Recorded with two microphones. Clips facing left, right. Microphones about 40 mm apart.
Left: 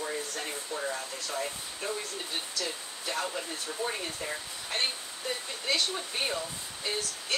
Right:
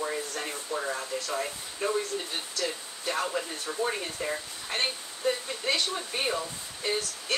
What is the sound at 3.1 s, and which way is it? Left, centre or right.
Speech, centre.